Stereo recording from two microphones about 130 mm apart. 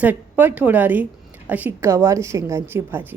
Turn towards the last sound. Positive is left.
turn(degrees=-20)  # may be behind; listen again after turning